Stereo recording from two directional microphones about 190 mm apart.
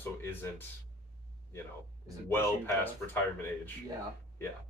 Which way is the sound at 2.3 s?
10° left (ahead or behind).